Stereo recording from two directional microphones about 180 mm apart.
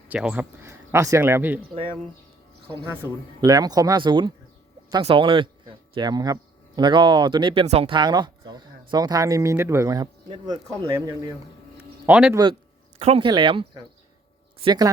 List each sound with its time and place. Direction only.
0.1 s speech: 5° right (ahead or behind)
2.8 s speech: 10° right (ahead or behind)
12.0 s speech: 10° right (ahead or behind)
13.0 s speech: 35° right (ahead or behind)